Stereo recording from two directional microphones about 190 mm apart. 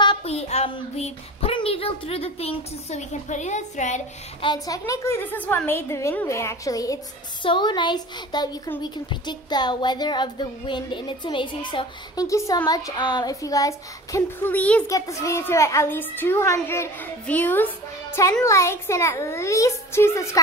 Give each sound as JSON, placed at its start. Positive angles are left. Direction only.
{"t": 0.0, "sound": "speech", "side_deg": 30}
{"t": 4.5, "sound": "a child's voice", "side_deg": 20}